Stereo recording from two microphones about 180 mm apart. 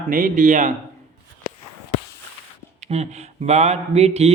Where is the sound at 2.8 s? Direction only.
35° right (ahead or behind).